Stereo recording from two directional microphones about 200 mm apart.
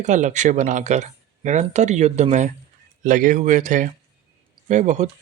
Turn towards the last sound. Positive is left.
turn(degrees=-35)  # may be behind; listen again after turning